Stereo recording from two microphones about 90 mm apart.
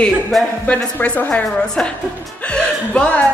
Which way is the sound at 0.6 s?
15° left (ahead or behind).